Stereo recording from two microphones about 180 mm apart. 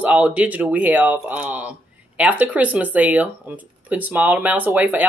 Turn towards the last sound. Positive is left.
turn(degrees=-10)  # may be behind; listen again after turning